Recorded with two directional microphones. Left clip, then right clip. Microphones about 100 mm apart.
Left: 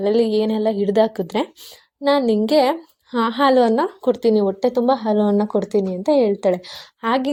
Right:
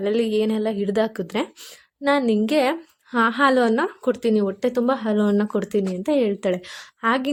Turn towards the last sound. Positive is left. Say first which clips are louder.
# left 2 dB
turn(degrees=15)  # may be behind; listen again after turning